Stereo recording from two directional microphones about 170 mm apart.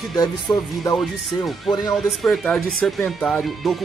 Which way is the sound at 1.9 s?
Centre (ahead or behind).